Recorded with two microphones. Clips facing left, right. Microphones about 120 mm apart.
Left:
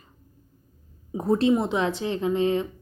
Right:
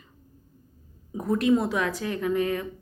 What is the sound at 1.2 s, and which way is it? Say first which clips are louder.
Speech: left 1 dB; 30° left (ahead or behind).